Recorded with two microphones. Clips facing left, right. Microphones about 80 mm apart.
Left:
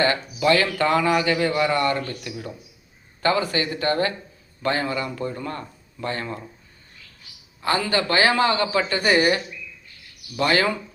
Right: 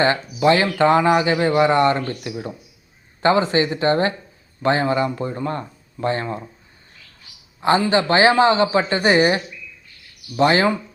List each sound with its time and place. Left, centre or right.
0.0 s speech: right
7.6 s speech: right